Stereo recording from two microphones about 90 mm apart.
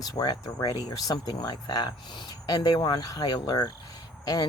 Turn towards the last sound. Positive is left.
turn(degrees=50)  # may be behind; listen again after turning